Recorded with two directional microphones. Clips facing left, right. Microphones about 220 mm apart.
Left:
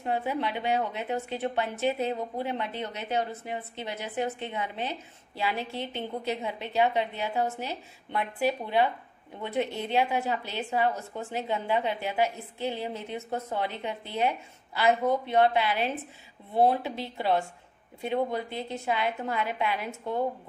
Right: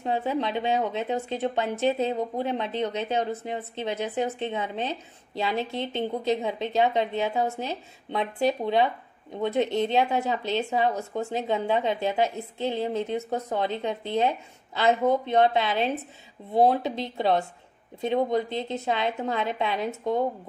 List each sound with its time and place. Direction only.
0.3 s a woman's voice: 20° right (ahead or behind)